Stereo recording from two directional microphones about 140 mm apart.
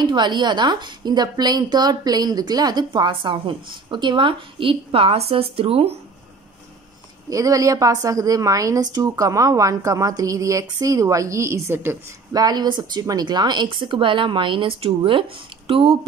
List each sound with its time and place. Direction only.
0.0 s a woman's voice: 30° right (ahead or behind)
7.2 s a woman's voice: 25° right (ahead or behind)
12.3 s a woman's voice: 30° right (ahead or behind)